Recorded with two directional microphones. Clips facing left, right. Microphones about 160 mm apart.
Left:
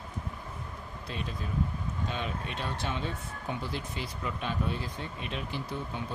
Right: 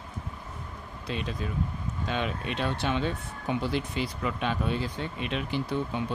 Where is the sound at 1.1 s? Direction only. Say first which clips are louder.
Right 4 dB; 90° right.